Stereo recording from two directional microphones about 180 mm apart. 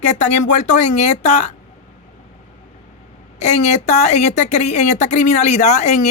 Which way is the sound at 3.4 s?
40° left (ahead or behind).